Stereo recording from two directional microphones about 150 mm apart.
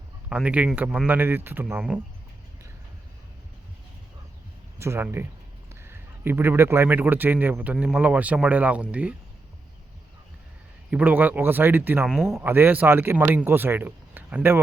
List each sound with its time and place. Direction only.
0.3 s a man's voice: 5° right (ahead or behind)
4.8 s a man's voice: 15° right (ahead or behind)
10.9 s a man's voice: 10° right (ahead or behind)
12.5 s a man's voice: 15° right (ahead or behind)